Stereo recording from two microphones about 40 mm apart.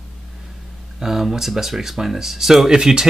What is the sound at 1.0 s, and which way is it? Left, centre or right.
Speech, centre.